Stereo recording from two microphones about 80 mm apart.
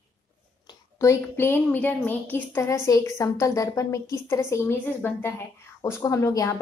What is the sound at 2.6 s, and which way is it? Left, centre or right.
A woman's voice, left.